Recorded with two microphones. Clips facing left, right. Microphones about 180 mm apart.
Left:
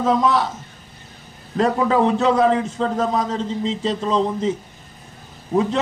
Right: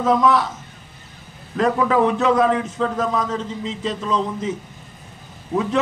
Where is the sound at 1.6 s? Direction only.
30° left (ahead or behind).